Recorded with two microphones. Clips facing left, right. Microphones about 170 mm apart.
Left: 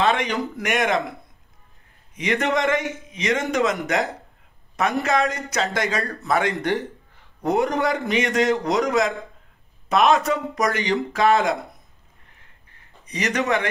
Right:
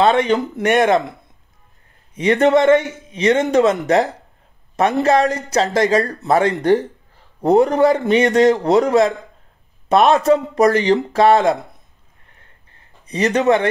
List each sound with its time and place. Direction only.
0.0 s a man's voice: 35° right (ahead or behind)
2.1 s a man's voice: 30° right (ahead or behind)
13.1 s a man's voice: 30° right (ahead or behind)